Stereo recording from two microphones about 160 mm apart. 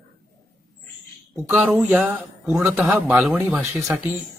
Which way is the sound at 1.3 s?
15° right (ahead or behind).